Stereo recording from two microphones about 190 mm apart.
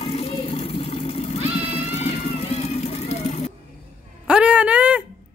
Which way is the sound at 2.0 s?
35° left (ahead or behind).